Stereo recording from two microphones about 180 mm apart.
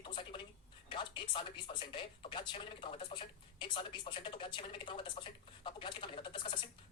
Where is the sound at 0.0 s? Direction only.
25° left (ahead or behind).